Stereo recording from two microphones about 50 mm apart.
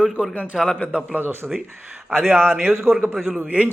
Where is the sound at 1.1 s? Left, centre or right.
Right.